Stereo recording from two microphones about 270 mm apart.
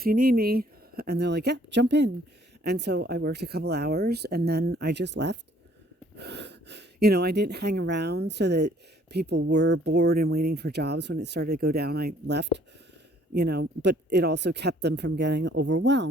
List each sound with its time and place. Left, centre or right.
0.0 s speech: right